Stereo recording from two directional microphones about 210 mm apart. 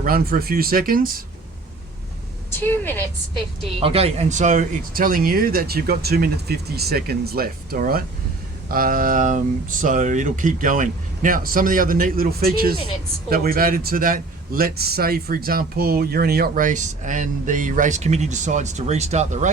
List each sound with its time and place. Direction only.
0.0 s speech: 45° right (ahead or behind)
2.5 s a woman's voice: 10° left (ahead or behind)
3.8 s a man's voice: 25° right (ahead or behind)